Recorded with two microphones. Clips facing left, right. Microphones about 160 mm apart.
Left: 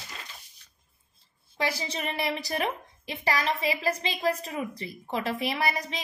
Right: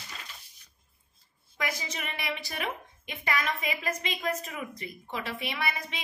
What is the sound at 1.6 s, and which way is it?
A woman's voice, 30° left (ahead or behind).